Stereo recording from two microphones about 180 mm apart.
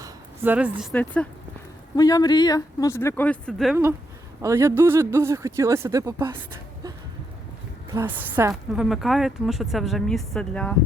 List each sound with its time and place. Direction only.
0.0 s a sound: 10° right (ahead or behind)
0.9 s speech: 5° left (ahead or behind)
2.0 s speech: 20° left (ahead or behind); by 3.8 s centre (ahead or behind)
4.4 s speech: 15° right (ahead or behind)
7.9 s a woman's voice: 10° right (ahead or behind); by 10.8 s 5° left (ahead or behind)